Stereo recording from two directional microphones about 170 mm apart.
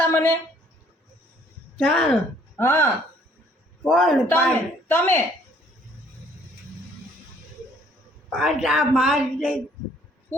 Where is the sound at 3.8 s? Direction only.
Centre (ahead or behind).